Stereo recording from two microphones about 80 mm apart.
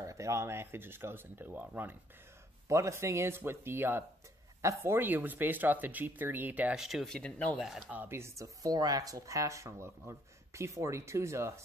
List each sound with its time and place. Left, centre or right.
0.0 s speech: right
2.7 s speech: right
6.7 s speech: centre
7.2 s speech: centre
7.5 s speech: centre
7.9 s speech: right
8.2 s speech: right